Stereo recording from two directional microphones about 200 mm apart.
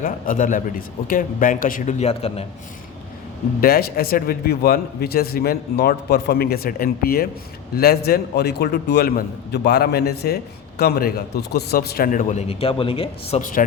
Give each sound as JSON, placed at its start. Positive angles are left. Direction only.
{"t": 0.0, "sound": "a man's voice", "side_deg": 40}
{"t": 3.6, "sound": "a man's voice", "side_deg": 50}
{"t": 13.4, "sound": "a man's voice", "side_deg": 40}